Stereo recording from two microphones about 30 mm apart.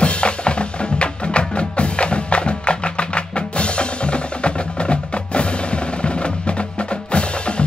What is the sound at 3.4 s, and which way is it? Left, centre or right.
Music, left.